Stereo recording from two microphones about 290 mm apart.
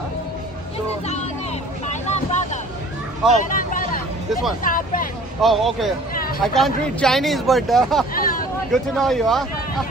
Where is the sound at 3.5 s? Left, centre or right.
Left.